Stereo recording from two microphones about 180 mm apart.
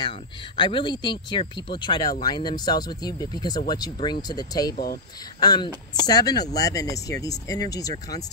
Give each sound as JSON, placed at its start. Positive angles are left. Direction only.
{"t": 0.6, "sound": "speech", "side_deg": 25}